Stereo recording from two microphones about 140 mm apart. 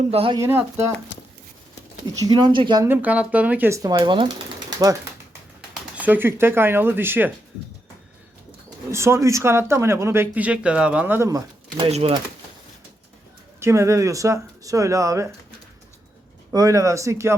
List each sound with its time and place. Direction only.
0.0 s speech: 45° right (ahead or behind)
0.3 s speech: 20° right (ahead or behind)
2.1 s speech: 30° right (ahead or behind)
2.8 s speech: 15° right (ahead or behind)
3.9 s speech: 35° right (ahead or behind)
6.0 s speech: 15° right (ahead or behind)
8.9 s speech: 20° right (ahead or behind)
11.9 s speech: 50° right (ahead or behind)
13.6 s speech: 20° right (ahead or behind)
16.5 s speech: 25° right (ahead or behind)